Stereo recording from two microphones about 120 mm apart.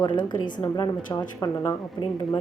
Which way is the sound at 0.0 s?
40° left (ahead or behind).